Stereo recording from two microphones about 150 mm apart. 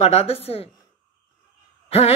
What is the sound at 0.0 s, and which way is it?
Speech, 45° left (ahead or behind).